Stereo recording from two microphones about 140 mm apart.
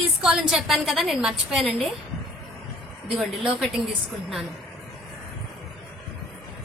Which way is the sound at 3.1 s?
Centre (ahead or behind).